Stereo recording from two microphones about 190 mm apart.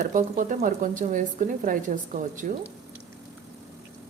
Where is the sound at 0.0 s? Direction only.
45° right (ahead or behind).